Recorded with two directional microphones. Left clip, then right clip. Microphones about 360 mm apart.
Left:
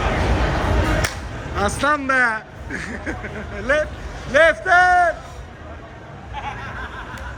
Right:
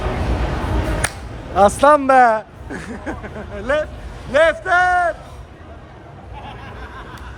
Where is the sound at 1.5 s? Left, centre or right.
Centre.